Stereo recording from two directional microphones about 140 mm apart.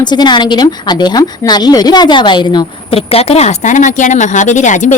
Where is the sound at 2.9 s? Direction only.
45° left (ahead or behind).